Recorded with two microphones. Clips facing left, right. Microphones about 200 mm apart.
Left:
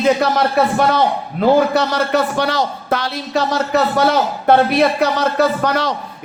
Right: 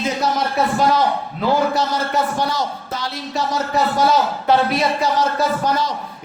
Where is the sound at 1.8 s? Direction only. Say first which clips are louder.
Left 4 dB; 70° left (ahead or behind).